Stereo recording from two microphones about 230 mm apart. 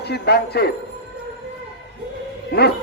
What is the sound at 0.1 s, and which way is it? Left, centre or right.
Speech, left.